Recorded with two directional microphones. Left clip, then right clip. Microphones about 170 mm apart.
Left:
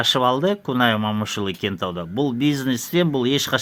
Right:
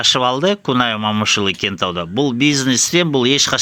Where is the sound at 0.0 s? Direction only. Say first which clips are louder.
Right 4 dB; 20° right (ahead or behind).